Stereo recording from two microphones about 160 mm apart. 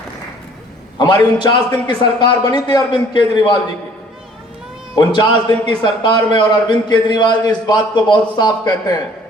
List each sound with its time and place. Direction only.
1.2 s a man's voice: 30° left (ahead or behind)
4.9 s a man's voice: 30° left (ahead or behind)